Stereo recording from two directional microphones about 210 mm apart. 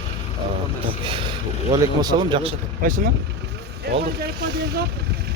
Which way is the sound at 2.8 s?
40° right (ahead or behind).